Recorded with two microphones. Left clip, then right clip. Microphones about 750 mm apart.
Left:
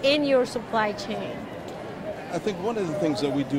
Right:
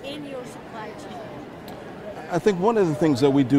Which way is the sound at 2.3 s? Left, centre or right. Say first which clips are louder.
Right 8 dB; right.